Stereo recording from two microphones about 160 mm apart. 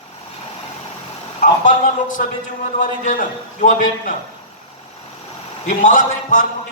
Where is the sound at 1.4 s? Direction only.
55° left (ahead or behind).